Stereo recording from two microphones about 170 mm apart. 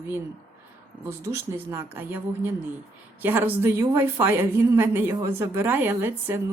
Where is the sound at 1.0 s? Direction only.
15° right (ahead or behind).